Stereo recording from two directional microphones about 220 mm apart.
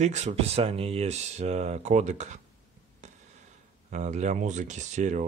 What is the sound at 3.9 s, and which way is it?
Speech, 30° right (ahead or behind).